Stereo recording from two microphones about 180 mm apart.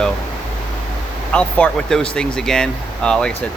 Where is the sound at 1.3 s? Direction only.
5° left (ahead or behind).